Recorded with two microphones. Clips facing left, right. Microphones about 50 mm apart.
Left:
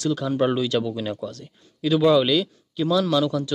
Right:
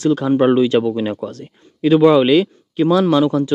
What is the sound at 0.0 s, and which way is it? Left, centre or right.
A man's voice, right.